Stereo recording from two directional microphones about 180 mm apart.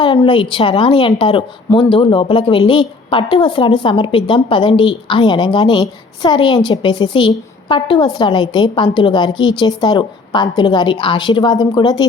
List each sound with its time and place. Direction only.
0.0 s a woman's voice: 30° left (ahead or behind)